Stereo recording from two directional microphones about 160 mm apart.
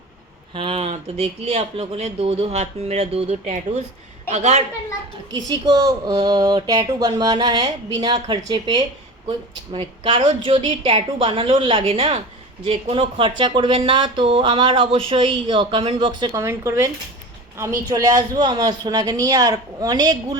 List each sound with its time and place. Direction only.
0.5 s a woman's voice: 35° right (ahead or behind)
5.5 s speech: 25° right (ahead or behind)
16.3 s speech: 20° right (ahead or behind)